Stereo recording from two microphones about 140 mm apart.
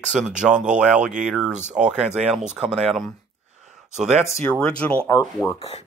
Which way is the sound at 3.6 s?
5° right (ahead or behind).